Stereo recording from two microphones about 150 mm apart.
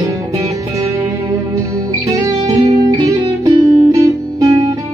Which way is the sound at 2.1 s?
20° right (ahead or behind).